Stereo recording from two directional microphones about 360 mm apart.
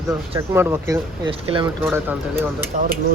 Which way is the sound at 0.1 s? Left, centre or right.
Centre.